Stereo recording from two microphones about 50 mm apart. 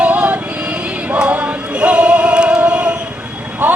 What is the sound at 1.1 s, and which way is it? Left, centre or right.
Choir, right.